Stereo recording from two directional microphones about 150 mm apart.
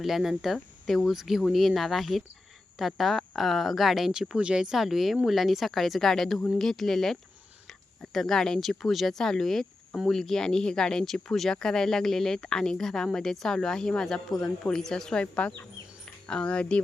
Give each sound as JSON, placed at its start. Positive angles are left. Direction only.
{"t": 0.0, "sound": "speech", "side_deg": 0}